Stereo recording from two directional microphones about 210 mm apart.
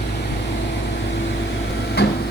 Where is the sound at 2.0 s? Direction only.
50° left (ahead or behind).